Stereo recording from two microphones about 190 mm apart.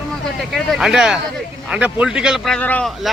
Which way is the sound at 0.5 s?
Centre (ahead or behind).